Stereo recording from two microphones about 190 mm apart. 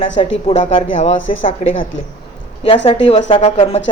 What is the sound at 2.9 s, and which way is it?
Speech, 30° left (ahead or behind).